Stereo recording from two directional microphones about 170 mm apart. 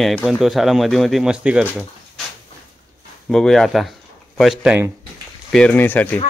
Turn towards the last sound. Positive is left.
turn(degrees=10)  # may be behind; listen again after turning